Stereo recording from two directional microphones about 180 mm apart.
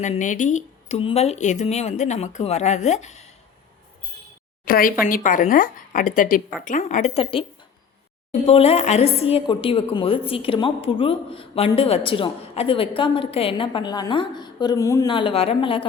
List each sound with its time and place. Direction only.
0.0 s speech: 45° left (ahead or behind)
4.6 s speech: 50° left (ahead or behind); by 15.1 s 15° left (ahead or behind)
15.1 s speech: 30° left (ahead or behind)